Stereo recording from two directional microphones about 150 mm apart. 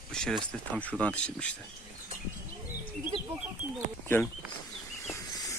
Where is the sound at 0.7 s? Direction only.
10° left (ahead or behind).